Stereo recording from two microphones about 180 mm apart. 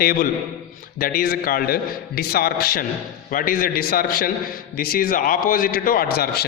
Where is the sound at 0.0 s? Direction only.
55° left (ahead or behind).